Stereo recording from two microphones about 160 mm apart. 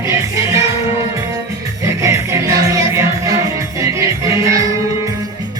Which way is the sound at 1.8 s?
20° right (ahead or behind).